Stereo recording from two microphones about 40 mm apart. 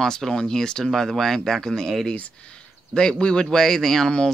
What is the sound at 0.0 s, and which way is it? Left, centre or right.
Speech, centre.